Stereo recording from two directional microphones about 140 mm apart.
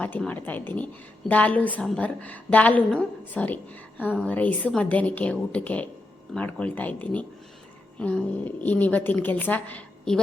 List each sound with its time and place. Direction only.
0.0 s a woman's voice: 10° left (ahead or behind)